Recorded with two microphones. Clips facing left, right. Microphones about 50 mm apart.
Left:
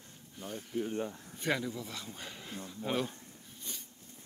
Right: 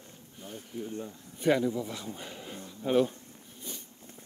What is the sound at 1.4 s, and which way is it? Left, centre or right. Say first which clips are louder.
Speech: right 8 dB; centre.